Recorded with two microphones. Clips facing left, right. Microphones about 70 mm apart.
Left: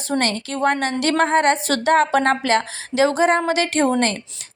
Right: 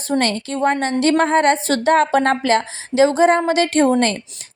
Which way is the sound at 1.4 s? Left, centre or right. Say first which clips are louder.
Right 2 dB; right.